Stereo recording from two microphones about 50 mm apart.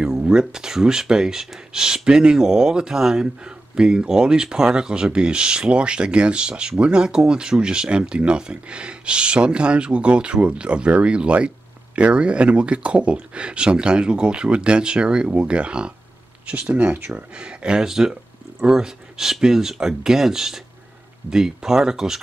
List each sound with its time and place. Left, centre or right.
0.0 s speech: centre
16.8 s speech: right
17.4 s speech: centre